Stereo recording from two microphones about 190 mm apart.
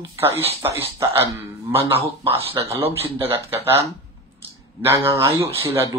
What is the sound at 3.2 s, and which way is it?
Speech, 10° right (ahead or behind).